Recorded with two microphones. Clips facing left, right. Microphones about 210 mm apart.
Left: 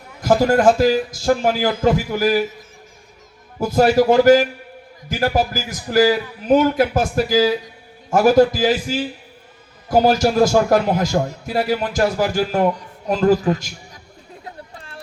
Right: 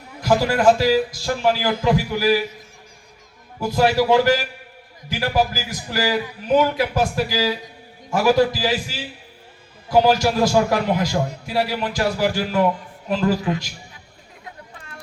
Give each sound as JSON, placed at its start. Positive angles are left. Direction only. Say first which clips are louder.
{"t": 0.2, "sound": "a man's voice", "louder": "left 4 dB", "side_deg": 45}
{"t": 3.6, "sound": "a man's voice", "louder": "left 4 dB", "side_deg": 45}
{"t": 14.4, "sound": "chatter", "louder": "left 2 dB", "side_deg": 35}